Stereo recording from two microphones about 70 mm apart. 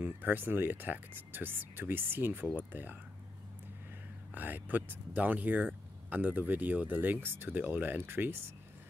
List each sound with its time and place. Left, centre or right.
0.0 s speech: right
4.3 s speech: right